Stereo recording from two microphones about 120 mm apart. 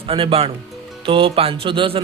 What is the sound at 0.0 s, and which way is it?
A man's voice, 50° right (ahead or behind).